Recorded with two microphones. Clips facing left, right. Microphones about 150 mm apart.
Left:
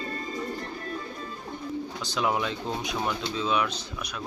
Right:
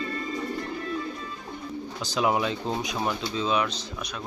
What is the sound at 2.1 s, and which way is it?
Speech, 5° right (ahead or behind).